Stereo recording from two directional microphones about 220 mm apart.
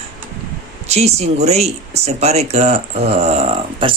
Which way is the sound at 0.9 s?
30° right (ahead or behind).